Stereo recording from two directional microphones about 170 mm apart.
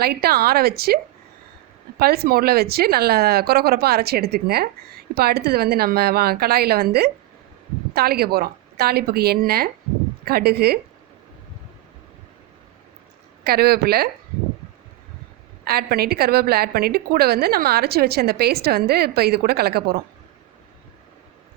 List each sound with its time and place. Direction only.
0.0 s speech: 65° right (ahead or behind)
2.0 s a woman's voice: 65° right (ahead or behind)
13.4 s a woman's voice: 65° right (ahead or behind)
15.6 s a woman's voice: 65° right (ahead or behind)